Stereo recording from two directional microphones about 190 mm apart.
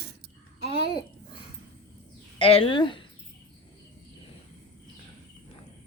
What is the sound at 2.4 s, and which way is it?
Speech, 30° left (ahead or behind).